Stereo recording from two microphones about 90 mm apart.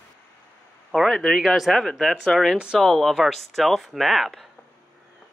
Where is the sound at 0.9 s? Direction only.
Centre (ahead or behind).